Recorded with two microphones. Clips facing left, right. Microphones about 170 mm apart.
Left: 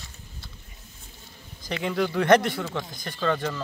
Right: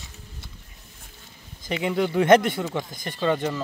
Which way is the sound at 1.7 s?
15° right (ahead or behind).